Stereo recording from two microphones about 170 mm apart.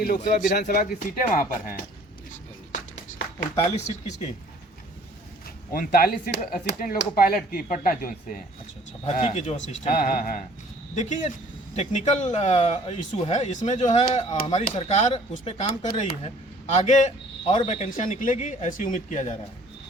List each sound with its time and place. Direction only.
0.0 s speech: 55° left (ahead or behind)
0.5 s speech: 65° left (ahead or behind)
3.1 s a sound: 50° left (ahead or behind)
3.8 s speech: 40° left (ahead or behind)
5.7 s speech: 60° left (ahead or behind); by 6.7 s 75° left (ahead or behind)
6.7 s speech: 55° left (ahead or behind)
9.2 s speech: 40° left (ahead or behind); by 10.4 s 55° left (ahead or behind)
10.9 s speech: 45° left (ahead or behind)